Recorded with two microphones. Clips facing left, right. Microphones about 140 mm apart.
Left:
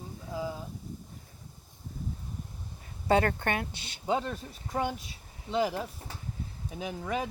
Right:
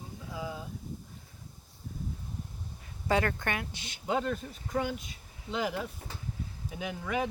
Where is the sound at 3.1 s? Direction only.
30° left (ahead or behind).